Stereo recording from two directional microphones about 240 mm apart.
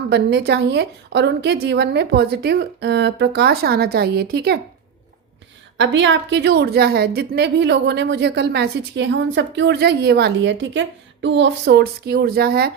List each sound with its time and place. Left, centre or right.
0.1 s a woman's voice: right
5.7 s a woman's voice: right